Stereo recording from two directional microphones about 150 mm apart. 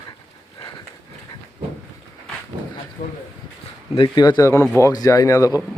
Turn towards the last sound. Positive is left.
turn(degrees=20)  # may be behind; listen again after turning